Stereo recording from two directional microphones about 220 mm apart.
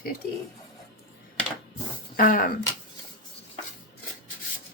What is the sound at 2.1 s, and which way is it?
Speech, 40° left (ahead or behind).